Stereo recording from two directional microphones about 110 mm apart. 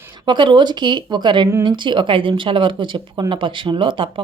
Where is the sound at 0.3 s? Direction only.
45° right (ahead or behind).